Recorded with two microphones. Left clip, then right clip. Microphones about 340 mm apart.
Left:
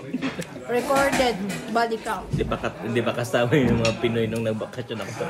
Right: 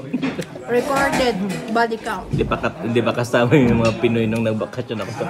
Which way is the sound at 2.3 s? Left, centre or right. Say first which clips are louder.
Right 6 dB; right.